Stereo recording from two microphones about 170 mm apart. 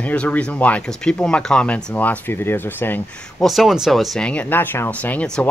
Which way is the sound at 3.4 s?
Centre (ahead or behind).